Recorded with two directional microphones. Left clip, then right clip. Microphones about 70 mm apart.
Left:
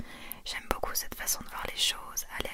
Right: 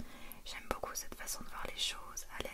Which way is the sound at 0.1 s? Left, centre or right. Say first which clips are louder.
Left 11 dB; left.